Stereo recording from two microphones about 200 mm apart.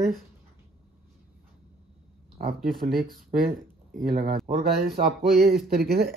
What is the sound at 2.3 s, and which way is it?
Speech, 45° right (ahead or behind).